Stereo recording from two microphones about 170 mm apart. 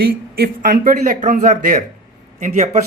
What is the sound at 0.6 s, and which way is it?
Speech, 55° right (ahead or behind).